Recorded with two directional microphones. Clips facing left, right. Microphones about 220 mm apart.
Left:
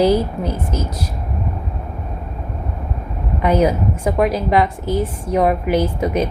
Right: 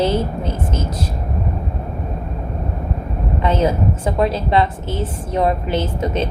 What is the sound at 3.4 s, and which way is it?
A woman's voice, 15° left (ahead or behind).